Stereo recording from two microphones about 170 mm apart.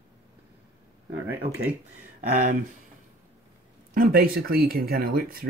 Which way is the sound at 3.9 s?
60° right (ahead or behind).